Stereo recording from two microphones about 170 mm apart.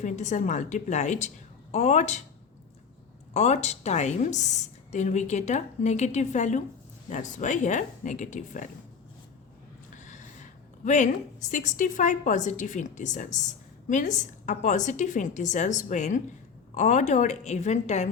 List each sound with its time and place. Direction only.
0.0 s a woman's voice: 45° left (ahead or behind)
3.3 s a woman's voice: 40° left (ahead or behind)
9.9 s a woman's voice: 50° left (ahead or behind)